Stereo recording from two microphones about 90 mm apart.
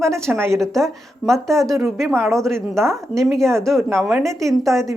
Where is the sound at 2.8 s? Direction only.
30° right (ahead or behind).